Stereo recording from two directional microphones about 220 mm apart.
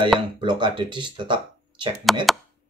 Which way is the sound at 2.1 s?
Centre (ahead or behind).